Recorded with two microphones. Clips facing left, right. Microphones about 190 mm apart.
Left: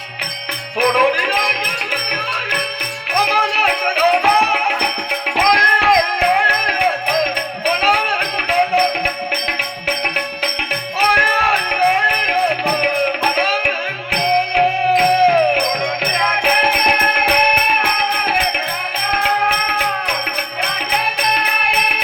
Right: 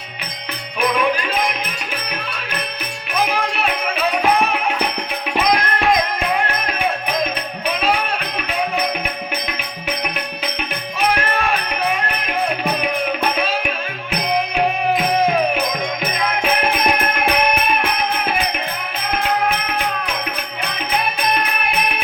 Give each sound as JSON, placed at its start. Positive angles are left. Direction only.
{"t": 3.2, "sound": "music", "side_deg": 80}
{"t": 7.8, "sound": "music", "side_deg": 80}
{"t": 11.1, "sound": "music", "side_deg": 80}
{"t": 13.3, "sound": "music", "side_deg": 85}
{"t": 21.6, "sound": "music", "side_deg": 85}